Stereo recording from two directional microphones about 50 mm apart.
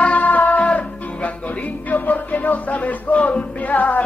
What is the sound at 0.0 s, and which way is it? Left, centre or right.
Music, left.